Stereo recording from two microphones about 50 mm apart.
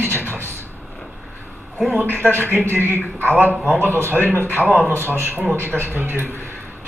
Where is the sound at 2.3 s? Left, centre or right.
Right.